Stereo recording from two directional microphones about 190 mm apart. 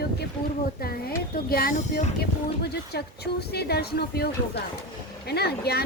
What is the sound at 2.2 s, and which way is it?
Speech, 55° left (ahead or behind).